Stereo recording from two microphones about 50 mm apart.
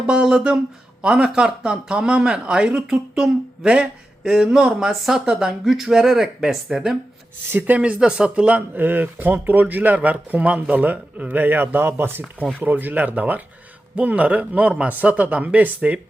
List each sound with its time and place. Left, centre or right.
0.1 s a sound: centre
7.9 s speech: centre; by 12.2 s right
12.5 s a man's voice: right